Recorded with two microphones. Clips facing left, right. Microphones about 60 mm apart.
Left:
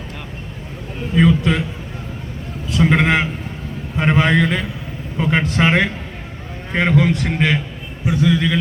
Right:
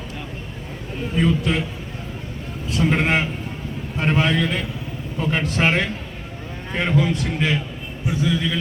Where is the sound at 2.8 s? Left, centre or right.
Left.